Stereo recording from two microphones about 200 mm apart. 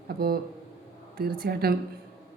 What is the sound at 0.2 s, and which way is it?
A man's voice, 50° right (ahead or behind).